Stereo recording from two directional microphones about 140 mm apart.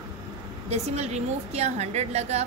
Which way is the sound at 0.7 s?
50° right (ahead or behind).